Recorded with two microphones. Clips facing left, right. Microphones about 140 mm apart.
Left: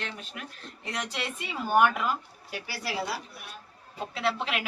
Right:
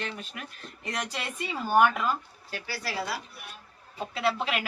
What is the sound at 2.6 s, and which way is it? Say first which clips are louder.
Speech: right 2 dB; 25° left (ahead or behind).